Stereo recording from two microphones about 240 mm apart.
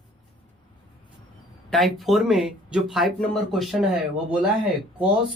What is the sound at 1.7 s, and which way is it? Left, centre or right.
Speech, centre.